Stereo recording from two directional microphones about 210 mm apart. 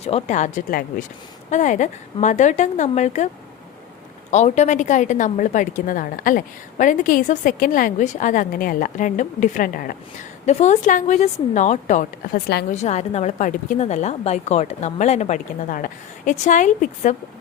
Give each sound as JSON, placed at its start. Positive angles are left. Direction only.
{"t": 0.0, "sound": "a woman's voice", "side_deg": 30}
{"t": 4.3, "sound": "a woman's voice", "side_deg": 35}